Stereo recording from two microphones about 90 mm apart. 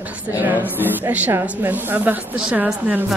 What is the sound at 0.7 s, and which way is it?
A woman's voice, 20° right (ahead or behind).